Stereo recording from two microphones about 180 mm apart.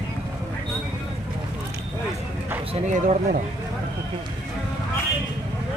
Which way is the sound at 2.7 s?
45° right (ahead or behind).